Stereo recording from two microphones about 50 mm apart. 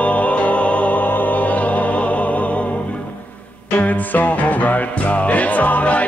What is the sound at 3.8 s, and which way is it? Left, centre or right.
Music, left.